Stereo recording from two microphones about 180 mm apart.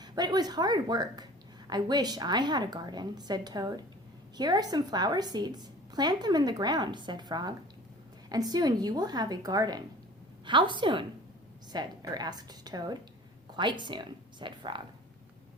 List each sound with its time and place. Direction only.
0.0 s a woman's voice: 25° right (ahead or behind)